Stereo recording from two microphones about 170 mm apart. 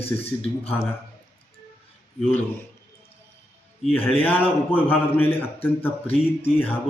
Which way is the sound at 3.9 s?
10° left (ahead or behind).